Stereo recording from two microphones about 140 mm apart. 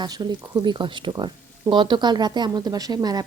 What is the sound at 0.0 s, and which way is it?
A woman's voice, 30° right (ahead or behind).